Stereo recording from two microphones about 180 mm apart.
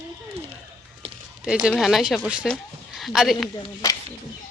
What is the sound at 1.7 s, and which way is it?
Speech, centre (ahead or behind).